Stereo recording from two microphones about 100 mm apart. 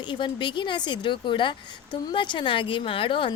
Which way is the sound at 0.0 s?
50° left (ahead or behind).